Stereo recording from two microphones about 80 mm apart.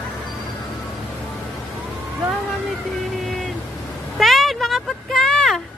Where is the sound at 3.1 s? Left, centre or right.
Centre.